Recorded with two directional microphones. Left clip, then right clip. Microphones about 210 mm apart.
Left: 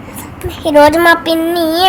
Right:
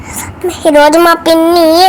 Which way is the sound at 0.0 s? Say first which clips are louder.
Right 8 dB; 30° right (ahead or behind).